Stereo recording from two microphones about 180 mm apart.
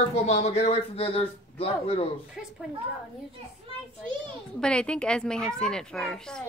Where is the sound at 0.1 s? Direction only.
35° left (ahead or behind).